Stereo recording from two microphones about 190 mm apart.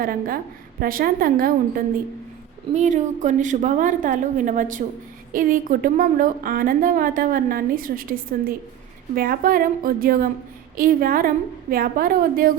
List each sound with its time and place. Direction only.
0.0 s a woman's voice: 50° right (ahead or behind)